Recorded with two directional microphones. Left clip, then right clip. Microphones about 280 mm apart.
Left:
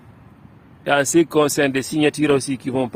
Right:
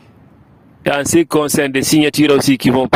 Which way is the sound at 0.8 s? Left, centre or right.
Right.